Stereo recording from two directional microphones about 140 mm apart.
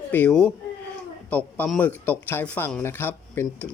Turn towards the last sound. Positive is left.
turn(degrees=15)  # may be behind; listen again after turning